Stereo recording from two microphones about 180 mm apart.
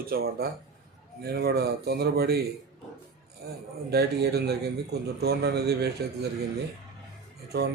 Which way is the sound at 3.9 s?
65° right (ahead or behind).